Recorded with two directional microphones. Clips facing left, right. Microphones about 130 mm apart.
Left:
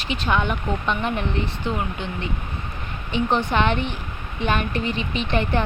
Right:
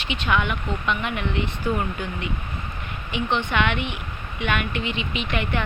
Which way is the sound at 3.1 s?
35° left (ahead or behind).